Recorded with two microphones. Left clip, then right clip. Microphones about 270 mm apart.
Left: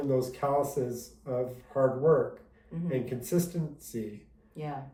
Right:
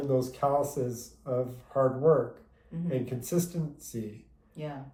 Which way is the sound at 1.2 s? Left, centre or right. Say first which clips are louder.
Right 1 dB; centre.